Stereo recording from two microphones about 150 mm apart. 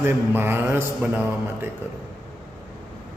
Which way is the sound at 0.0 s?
15° right (ahead or behind).